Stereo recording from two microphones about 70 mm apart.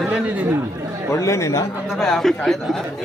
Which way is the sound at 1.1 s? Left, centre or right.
Left.